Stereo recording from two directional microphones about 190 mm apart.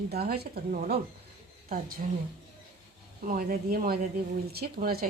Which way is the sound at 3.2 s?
45° right (ahead or behind).